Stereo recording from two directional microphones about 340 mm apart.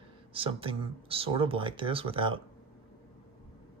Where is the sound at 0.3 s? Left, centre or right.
Centre.